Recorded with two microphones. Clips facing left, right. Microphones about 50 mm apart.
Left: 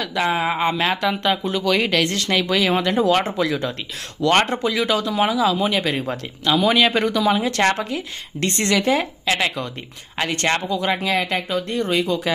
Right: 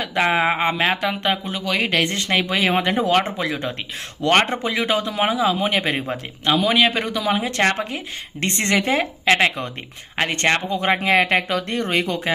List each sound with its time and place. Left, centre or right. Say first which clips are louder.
0.1 s speech: right 3 dB; right
0.6 s speech: even; right
2.0 s speech: even; right
3.0 s speech: left 1 dB; centre; by 6.0 s right
6.9 s speech: left 3 dB; centre
7.8 s speech: left 1 dB; right
11.4 s speech: even; right